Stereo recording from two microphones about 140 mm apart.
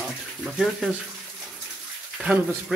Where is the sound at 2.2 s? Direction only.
10° right (ahead or behind).